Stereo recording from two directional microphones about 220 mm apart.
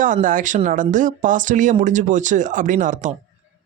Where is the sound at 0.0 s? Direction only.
35° right (ahead or behind).